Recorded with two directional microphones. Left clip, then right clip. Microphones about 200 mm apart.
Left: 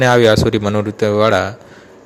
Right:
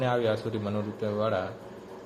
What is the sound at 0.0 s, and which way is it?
A man's voice, 55° left (ahead or behind).